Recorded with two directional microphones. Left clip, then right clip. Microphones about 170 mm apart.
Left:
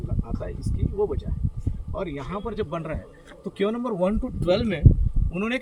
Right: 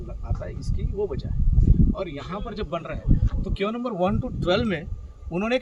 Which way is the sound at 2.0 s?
15° right (ahead or behind).